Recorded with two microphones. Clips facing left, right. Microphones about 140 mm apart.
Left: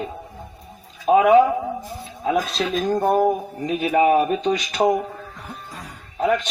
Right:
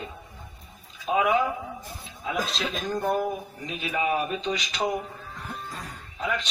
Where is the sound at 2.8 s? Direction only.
45° left (ahead or behind).